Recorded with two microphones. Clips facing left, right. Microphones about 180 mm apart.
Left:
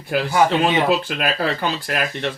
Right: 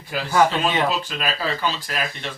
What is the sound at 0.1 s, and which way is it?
Speech, 55° left (ahead or behind).